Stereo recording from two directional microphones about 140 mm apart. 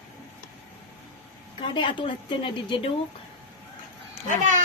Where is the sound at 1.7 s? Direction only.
35° left (ahead or behind).